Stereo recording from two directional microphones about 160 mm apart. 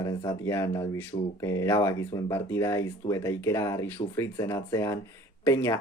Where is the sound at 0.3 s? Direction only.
20° left (ahead or behind).